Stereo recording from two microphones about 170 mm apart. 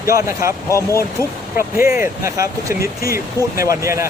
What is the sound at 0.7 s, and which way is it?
Speech, 15° left (ahead or behind).